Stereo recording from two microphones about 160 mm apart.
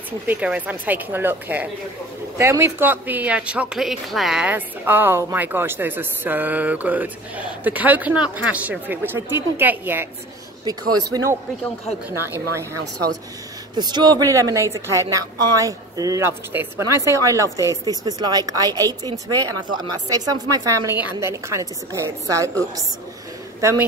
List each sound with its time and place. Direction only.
0.3 s speech: 10° right (ahead or behind)
10.6 s a woman's voice: 25° right (ahead or behind)
13.7 s a woman's voice: 25° right (ahead or behind)